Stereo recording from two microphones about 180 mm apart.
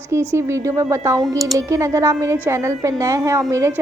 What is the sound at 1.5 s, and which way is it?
A woman's voice, 15° right (ahead or behind).